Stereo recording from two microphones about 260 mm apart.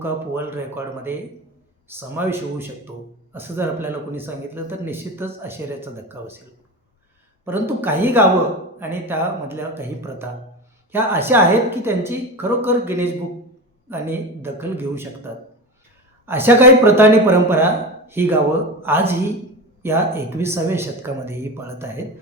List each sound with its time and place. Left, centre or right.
0.0 s speech: centre
7.4 s speech: centre